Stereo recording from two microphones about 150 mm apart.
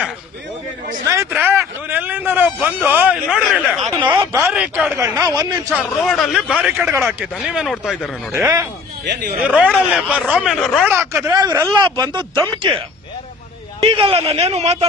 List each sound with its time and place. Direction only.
1.0 s a man's voice: 20° right (ahead or behind); by 3.9 s centre (ahead or behind)
3.9 s speech: 30° right (ahead or behind)
4.4 s a man's voice: 15° right (ahead or behind)
5.7 s a man's voice: centre (ahead or behind)
8.3 s speech: 20° right (ahead or behind)
9.4 s a man's voice: 10° right (ahead or behind)
10.8 s a man's voice: 15° right (ahead or behind)
13.8 s a man's voice: 35° right (ahead or behind)